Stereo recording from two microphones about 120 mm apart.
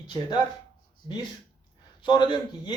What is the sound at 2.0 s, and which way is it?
Speech, 40° left (ahead or behind).